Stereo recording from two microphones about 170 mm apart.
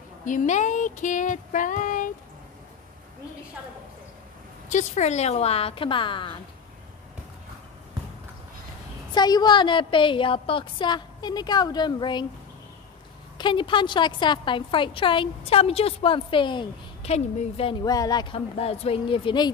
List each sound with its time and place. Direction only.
0.2 s female singing: 50° left (ahead or behind)
4.6 s speech: 45° left (ahead or behind); by 6.3 s 30° left (ahead or behind)
9.1 s a woman's voice: 25° left (ahead or behind)
13.4 s a woman's voice: 30° left (ahead or behind)
17.8 s speech: 20° left (ahead or behind)